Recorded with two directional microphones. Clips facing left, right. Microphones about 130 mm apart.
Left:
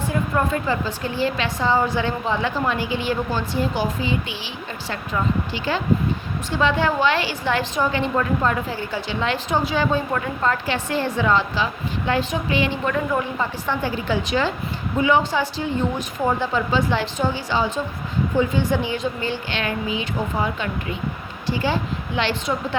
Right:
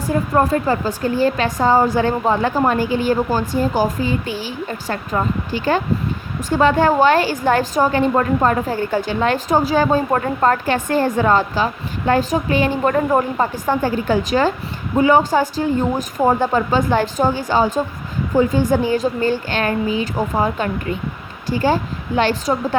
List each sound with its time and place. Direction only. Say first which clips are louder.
0.1 s a woman's voice: right 7 dB; 40° right (ahead or behind)